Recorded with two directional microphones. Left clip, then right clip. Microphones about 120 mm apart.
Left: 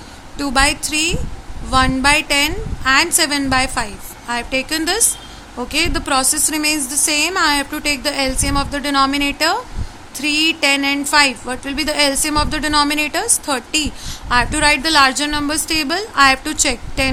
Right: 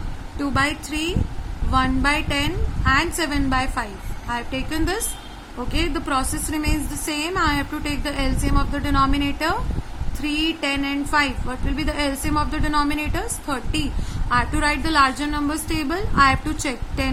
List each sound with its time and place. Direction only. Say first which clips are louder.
0.3 s speech: left 6 dB; 35° left (ahead or behind)